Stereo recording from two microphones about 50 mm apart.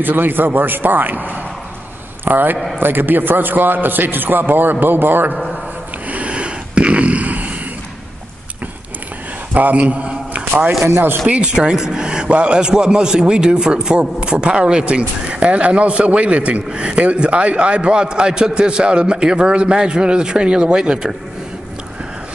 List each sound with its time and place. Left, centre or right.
0.0 s a man's voice: right
6.0 s a sound: right
9.5 s a man's voice: right; by 21.1 s centre